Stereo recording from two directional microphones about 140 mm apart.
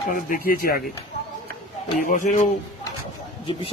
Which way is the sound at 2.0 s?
65° left (ahead or behind).